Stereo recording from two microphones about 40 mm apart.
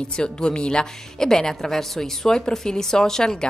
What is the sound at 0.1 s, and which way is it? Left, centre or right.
Speech, left.